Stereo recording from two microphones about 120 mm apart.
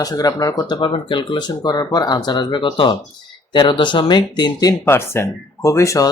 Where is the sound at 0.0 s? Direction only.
30° left (ahead or behind).